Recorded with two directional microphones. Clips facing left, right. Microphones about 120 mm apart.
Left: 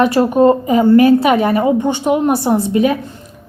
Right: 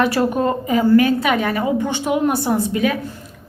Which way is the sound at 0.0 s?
30° left (ahead or behind).